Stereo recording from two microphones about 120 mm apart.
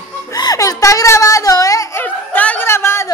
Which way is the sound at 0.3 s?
30° left (ahead or behind).